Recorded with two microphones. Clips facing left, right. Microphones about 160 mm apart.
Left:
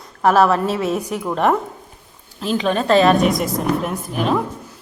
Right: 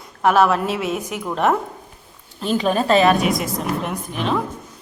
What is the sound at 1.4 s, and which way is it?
A woman's voice, centre (ahead or behind).